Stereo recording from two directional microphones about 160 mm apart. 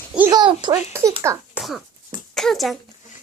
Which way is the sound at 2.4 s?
Centre (ahead or behind).